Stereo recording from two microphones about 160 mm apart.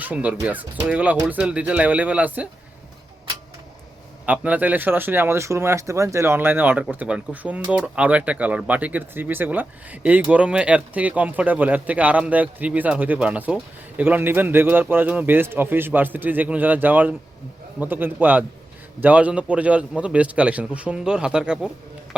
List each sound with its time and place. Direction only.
0.0 s speech: 10° right (ahead or behind)
4.3 s speech: 10° right (ahead or behind)